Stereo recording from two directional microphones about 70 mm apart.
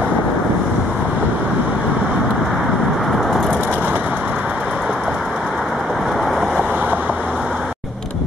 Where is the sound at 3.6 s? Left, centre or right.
Right; by 6.5 s centre.